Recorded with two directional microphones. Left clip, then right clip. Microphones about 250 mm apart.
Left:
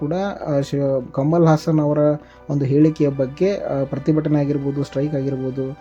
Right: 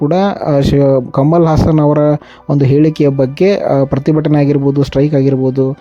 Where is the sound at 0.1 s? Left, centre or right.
Right.